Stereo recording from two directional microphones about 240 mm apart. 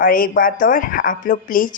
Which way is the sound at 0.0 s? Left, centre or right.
Left.